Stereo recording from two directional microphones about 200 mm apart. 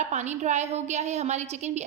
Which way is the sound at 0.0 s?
35° right (ahead or behind).